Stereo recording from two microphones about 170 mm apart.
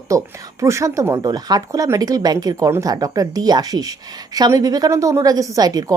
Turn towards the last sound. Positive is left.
turn(degrees=-20)  # may be behind; listen again after turning